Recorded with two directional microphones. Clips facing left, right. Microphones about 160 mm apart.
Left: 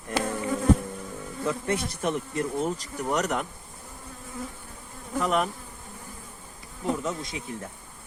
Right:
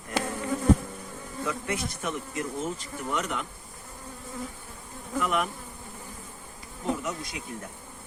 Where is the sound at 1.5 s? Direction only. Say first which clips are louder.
Left 4 dB; 30° left (ahead or behind).